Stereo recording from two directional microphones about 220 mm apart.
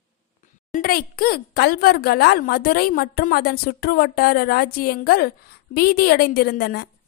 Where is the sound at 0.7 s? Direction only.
40° left (ahead or behind).